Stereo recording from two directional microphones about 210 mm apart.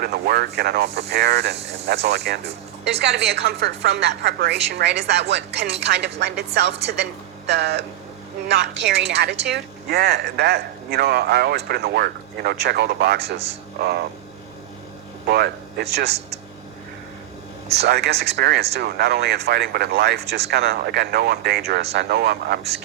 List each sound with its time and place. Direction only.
0.0 s a woman's voice: 50° right (ahead or behind)
15.3 s a woman's voice: 50° right (ahead or behind)
17.7 s a woman's voice: 55° right (ahead or behind)